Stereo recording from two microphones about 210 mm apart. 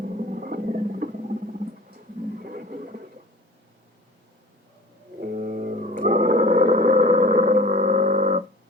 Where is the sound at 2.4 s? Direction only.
45° right (ahead or behind).